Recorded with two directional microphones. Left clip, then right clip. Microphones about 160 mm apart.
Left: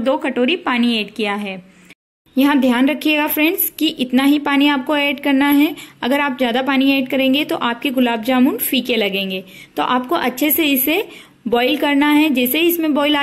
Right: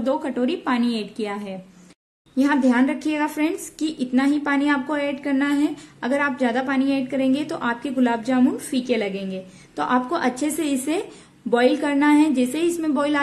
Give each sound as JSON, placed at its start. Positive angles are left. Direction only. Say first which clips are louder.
{"t": 0.0, "sound": "a woman's voice", "louder": "left 6 dB", "side_deg": 15}